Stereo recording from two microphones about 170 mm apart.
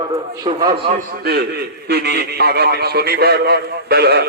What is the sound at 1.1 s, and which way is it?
A man's voice, 70° right (ahead or behind).